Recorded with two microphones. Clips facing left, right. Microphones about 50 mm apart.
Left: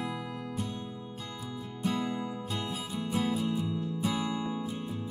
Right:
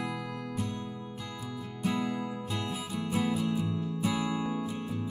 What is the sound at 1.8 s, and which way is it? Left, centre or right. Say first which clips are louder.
Music: right 1 dB; right.